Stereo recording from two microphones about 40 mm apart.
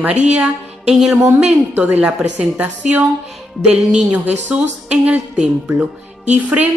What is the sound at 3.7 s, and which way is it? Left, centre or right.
Speech, right.